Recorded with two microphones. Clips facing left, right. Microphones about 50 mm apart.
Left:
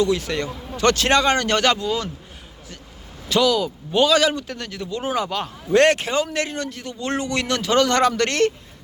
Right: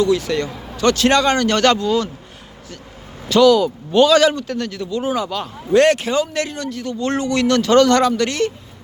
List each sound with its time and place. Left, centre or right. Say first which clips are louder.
0.0 s speech: right 4 dB; left
1.5 s a man's voice: right 4 dB; centre
3.4 s speech: right 10 dB; centre
4.4 s a man's voice: right 6 dB; centre
4.9 s speech: right 1 dB; left
7.6 s a man's voice: right 6 dB; centre
8.0 s speech: right 1 dB; left